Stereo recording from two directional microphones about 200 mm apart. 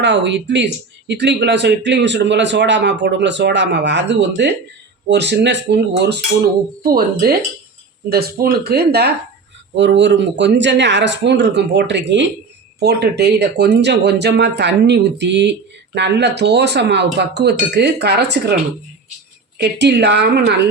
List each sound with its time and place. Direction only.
0.0 s speech: 60° right (ahead or behind)
19.5 s speech: 55° right (ahead or behind)